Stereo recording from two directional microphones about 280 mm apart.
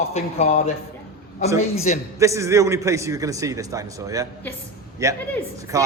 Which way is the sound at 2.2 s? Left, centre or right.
Centre.